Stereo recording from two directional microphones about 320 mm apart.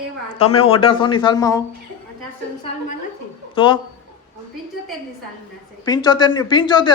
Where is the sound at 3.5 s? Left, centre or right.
Centre.